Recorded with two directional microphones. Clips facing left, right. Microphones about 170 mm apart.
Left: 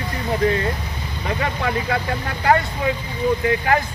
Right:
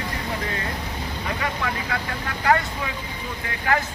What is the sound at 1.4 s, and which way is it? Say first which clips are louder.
Speech: left 6 dB; 30° left (ahead or behind).